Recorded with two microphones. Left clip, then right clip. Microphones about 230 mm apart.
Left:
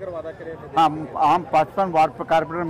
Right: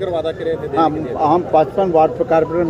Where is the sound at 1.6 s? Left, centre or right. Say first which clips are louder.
Right 5 dB; left.